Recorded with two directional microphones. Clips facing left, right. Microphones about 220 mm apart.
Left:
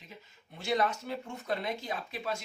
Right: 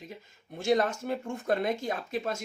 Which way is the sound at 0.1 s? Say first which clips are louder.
Right 7 dB; 45° right (ahead or behind).